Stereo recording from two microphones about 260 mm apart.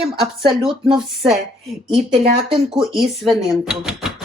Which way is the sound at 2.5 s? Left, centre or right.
Centre.